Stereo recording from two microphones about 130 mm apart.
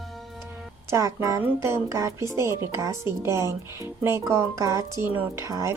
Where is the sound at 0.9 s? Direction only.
25° right (ahead or behind).